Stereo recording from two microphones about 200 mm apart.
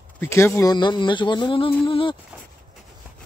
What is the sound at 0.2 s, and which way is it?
Speech, 10° left (ahead or behind).